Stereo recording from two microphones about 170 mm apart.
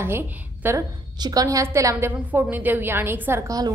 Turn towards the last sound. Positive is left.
turn(degrees=-15)  # may be behind; listen again after turning